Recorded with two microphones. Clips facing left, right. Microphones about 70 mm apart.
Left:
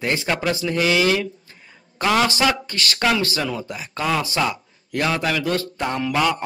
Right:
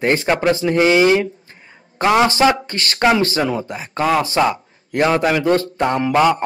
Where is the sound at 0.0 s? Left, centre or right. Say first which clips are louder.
Right 6 dB; right.